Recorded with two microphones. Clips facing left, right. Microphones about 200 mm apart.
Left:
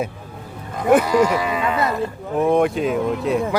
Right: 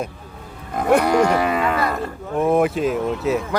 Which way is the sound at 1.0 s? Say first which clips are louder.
Right 1 dB; 60° right (ahead or behind).